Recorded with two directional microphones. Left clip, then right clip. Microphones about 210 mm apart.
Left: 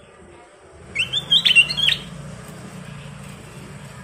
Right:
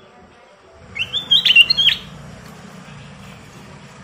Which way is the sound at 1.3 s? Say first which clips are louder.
Right 4 dB; 5° right (ahead or behind).